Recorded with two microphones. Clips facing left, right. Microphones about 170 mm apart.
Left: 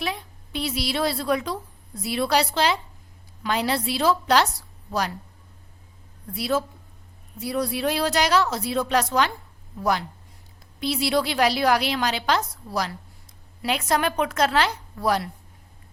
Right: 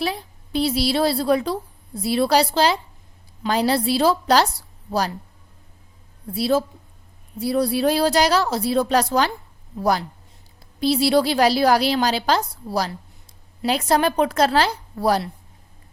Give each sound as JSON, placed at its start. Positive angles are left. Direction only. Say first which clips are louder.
{"t": 0.0, "sound": "a woman's voice", "louder": "right 4 dB", "side_deg": -35}
{"t": 6.2, "sound": "a woman's voice", "louder": "right 5 dB", "side_deg": -30}